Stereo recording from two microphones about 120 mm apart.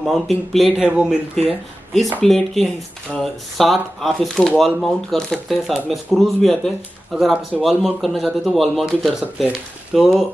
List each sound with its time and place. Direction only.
0.0 s speech: centre (ahead or behind)